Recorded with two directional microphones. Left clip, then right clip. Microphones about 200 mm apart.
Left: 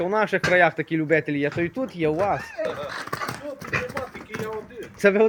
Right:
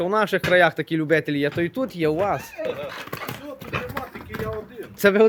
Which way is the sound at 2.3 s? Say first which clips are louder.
Even; 15° right (ahead or behind).